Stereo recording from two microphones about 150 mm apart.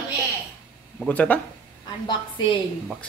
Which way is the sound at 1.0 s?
10° left (ahead or behind).